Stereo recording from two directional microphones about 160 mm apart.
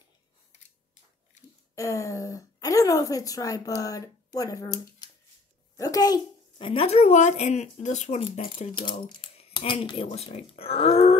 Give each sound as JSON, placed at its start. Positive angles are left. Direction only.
{"t": 1.8, "sound": "speech", "side_deg": 20}
{"t": 5.8, "sound": "speech", "side_deg": 25}
{"t": 8.9, "sound": "speech", "side_deg": 30}